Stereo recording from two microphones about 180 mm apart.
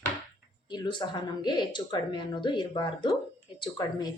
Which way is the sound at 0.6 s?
25° left (ahead or behind).